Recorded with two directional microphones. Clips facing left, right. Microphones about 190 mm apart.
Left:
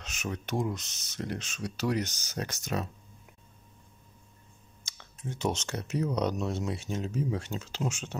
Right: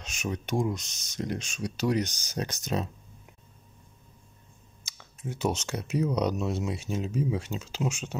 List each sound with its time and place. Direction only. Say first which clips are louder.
0.0 s speech: right 3 dB; 15° right (ahead or behind)
4.8 s speech: right 2 dB; 10° right (ahead or behind)